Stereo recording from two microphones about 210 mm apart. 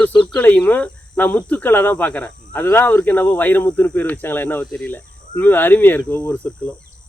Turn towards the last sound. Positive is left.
turn(degrees=10)  # may be behind; listen again after turning